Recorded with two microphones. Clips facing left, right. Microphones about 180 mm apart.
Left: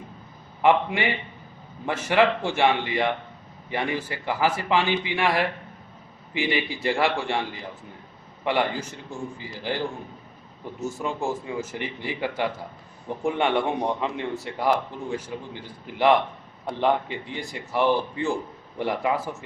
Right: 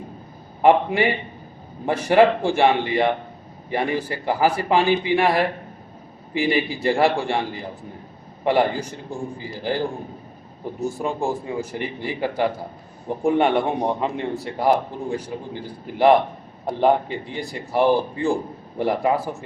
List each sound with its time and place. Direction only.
0.6 s a man's voice: 35° right (ahead or behind)